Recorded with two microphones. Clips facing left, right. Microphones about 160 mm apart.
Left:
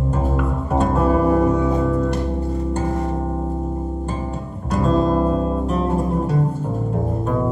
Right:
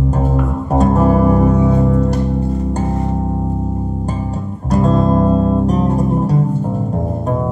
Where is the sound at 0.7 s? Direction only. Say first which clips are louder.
Right 5 dB; 40° right (ahead or behind).